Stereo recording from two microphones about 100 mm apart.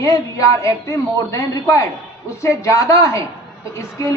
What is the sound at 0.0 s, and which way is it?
A man's voice, 35° left (ahead or behind).